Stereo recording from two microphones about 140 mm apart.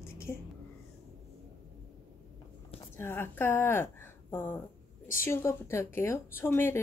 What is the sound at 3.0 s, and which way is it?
A woman's voice, 15° left (ahead or behind).